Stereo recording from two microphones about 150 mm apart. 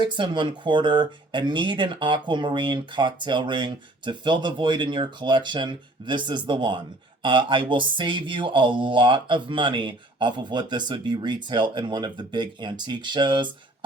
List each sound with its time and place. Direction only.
0.0 s speech: 30° right (ahead or behind)